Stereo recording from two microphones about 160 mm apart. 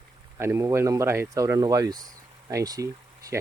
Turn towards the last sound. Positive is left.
turn(degrees=-20)  # may be behind; listen again after turning